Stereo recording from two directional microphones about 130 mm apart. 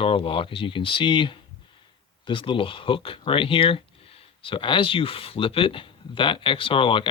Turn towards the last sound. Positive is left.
turn(degrees=40)  # may be behind; listen again after turning